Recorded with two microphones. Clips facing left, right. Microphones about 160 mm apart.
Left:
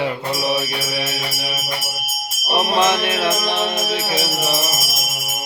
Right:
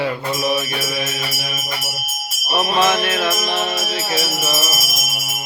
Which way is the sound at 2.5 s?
25° left (ahead or behind).